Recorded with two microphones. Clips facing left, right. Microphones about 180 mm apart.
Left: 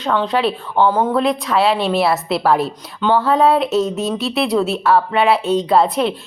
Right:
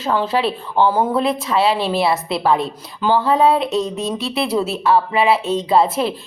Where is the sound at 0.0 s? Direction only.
5° right (ahead or behind).